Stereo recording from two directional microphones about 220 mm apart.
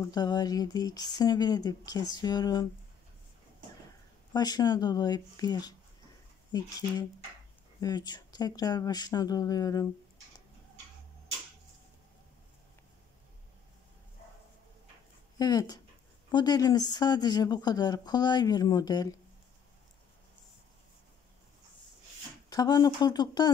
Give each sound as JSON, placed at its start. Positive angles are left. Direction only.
{"t": 0.0, "sound": "speech", "side_deg": 20}
{"t": 4.3, "sound": "speech", "side_deg": 20}
{"t": 7.8, "sound": "speech", "side_deg": 20}
{"t": 15.3, "sound": "speech", "side_deg": 15}
{"t": 22.5, "sound": "speech", "side_deg": 15}